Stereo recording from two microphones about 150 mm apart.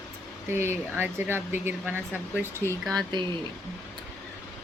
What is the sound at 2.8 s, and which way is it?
Speech, 5° left (ahead or behind).